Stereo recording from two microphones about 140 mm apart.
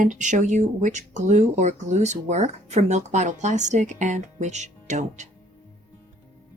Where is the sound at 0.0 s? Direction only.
65° right (ahead or behind).